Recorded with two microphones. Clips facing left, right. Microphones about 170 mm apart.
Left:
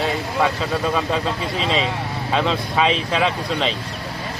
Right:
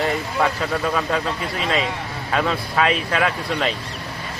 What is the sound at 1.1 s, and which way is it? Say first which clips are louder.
Speech: left 1 dB; 25° left (ahead or behind).